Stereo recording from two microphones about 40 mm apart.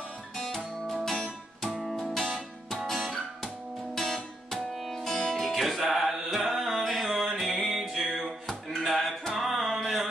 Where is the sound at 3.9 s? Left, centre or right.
Centre.